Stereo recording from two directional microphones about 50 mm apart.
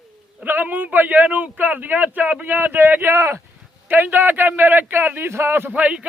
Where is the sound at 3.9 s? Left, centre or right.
Right.